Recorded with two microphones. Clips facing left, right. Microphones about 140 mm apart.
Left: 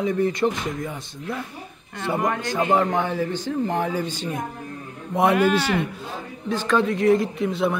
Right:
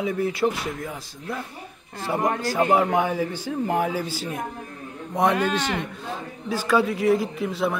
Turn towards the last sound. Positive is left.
turn(degrees=0)  # may be behind; listen again after turning